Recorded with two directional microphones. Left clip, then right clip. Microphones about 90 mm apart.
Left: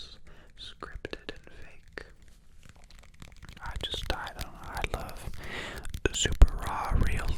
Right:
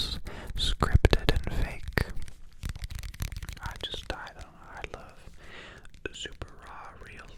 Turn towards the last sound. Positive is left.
turn(degrees=40)  # may be behind; listen again after turning